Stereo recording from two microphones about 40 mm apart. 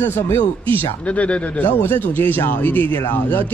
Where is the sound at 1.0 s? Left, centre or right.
Left.